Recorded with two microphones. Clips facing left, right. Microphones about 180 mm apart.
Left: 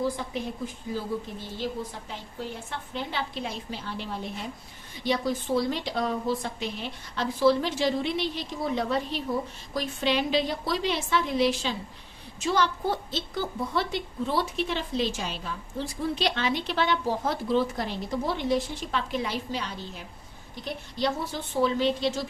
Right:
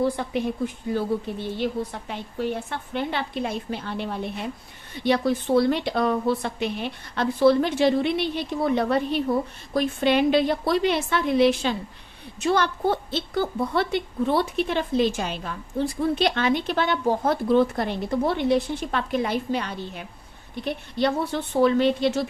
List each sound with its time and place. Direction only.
0.0 s a woman's voice: 65° right (ahead or behind)